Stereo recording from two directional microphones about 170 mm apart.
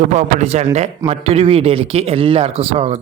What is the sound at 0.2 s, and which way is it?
Speech, 40° right (ahead or behind).